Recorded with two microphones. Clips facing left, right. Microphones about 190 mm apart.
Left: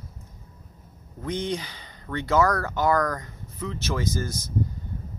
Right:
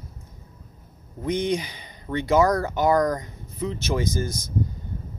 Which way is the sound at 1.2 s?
15° right (ahead or behind).